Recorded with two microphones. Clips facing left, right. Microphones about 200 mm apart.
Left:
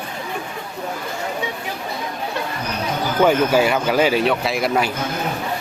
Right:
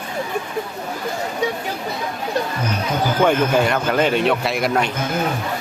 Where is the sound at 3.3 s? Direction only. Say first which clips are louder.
Left 3 dB; 5° left (ahead or behind).